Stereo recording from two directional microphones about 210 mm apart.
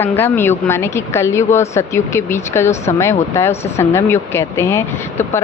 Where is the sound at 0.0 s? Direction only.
10° left (ahead or behind).